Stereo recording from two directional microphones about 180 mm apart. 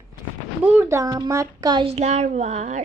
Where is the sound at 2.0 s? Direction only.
40° right (ahead or behind).